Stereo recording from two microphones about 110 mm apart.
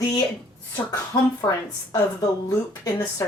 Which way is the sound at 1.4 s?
35° left (ahead or behind).